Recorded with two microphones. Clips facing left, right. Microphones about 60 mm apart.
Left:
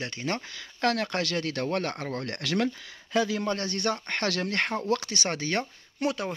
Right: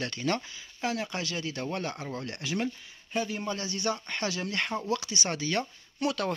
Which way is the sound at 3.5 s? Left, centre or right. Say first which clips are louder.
Left 3 dB; left.